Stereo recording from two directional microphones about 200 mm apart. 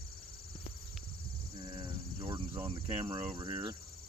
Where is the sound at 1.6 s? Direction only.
25° right (ahead or behind).